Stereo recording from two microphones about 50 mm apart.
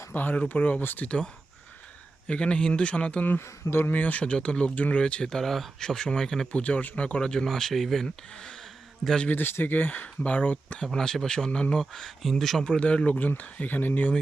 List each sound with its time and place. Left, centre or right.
0.1 s speech: left
1.0 s speech: left
3.4 s speech: left
3.9 s speech: left
5.3 s speech: centre
6.5 s speech: left
7.4 s speech: centre
9.3 s speech: left
10.9 s speech: centre
11.8 s speech: centre
12.6 s speech: left